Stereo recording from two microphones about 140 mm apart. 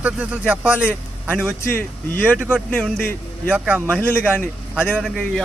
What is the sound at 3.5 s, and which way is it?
Speech, 10° right (ahead or behind).